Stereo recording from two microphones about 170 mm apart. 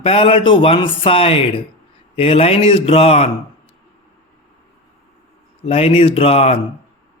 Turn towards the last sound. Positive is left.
turn(degrees=35)  # may be behind; listen again after turning